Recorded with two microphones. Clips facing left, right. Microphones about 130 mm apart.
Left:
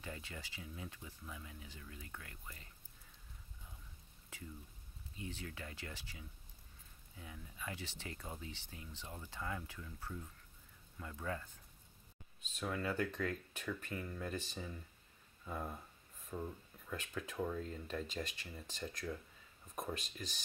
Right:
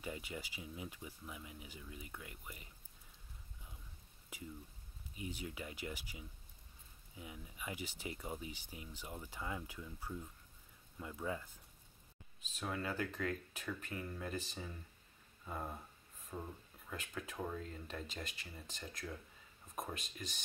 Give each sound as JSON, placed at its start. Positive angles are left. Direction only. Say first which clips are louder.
{"t": 0.0, "sound": "speech", "louder": "right 4 dB", "side_deg": -15}
{"t": 5.1, "sound": "speech", "louder": "right 2 dB", "side_deg": -15}
{"t": 16.3, "sound": "speech", "louder": "left 3 dB", "side_deg": -20}
{"t": 16.9, "sound": "speech", "louder": "left 2 dB", "side_deg": 0}